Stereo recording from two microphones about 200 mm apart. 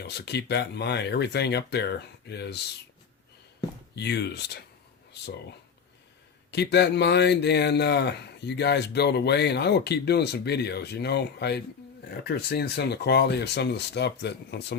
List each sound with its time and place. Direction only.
0.0 s speech: 55° left (ahead or behind)
3.9 s speech: 55° left (ahead or behind)
6.5 s speech: 60° left (ahead or behind)